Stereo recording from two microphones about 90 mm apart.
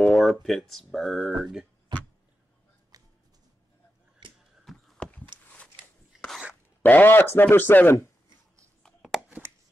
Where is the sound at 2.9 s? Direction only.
45° right (ahead or behind).